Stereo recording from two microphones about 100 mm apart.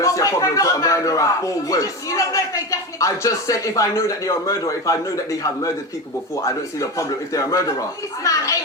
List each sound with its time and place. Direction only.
0.0 s speech: 35° left (ahead or behind)